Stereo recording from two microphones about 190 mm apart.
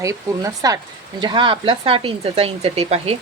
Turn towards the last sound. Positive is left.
turn(degrees=-30)  # may be behind; listen again after turning